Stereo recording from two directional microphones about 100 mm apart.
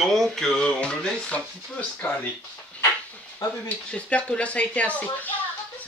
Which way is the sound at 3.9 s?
10° left (ahead or behind).